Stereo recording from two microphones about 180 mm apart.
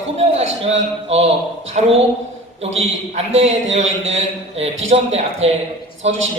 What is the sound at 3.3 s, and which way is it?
Speech, 90° right.